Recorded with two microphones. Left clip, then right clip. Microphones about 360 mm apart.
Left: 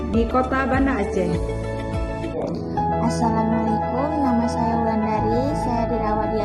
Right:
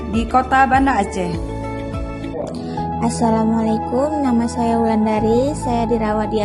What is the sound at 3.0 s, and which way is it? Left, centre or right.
Speech, right.